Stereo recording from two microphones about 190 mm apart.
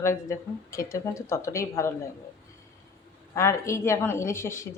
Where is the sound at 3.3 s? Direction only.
15° left (ahead or behind).